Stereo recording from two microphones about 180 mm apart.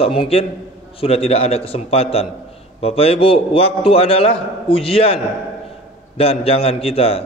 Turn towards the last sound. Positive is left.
turn(degrees=35)  # may be behind; listen again after turning